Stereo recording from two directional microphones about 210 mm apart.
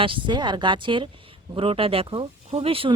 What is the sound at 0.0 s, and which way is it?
Speech, 20° right (ahead or behind).